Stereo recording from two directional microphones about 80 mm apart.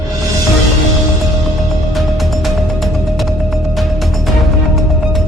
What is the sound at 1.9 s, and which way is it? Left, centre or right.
Music, centre.